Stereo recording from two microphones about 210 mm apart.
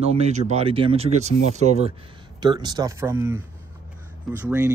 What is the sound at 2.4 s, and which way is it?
Speech, 20° right (ahead or behind).